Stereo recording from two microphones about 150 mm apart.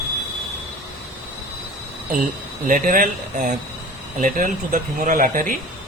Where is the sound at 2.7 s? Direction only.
60° right (ahead or behind).